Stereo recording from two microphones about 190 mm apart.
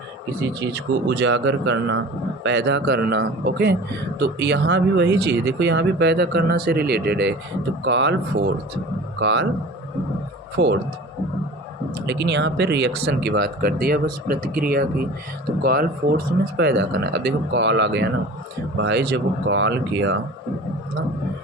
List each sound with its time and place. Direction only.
0.7 s a man's voice: 65° right (ahead or behind)
10.6 s a man's voice: 65° right (ahead or behind)
11.9 s a man's voice: 65° right (ahead or behind)